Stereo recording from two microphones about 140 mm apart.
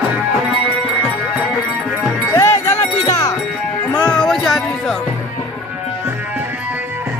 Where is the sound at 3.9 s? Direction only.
10° left (ahead or behind).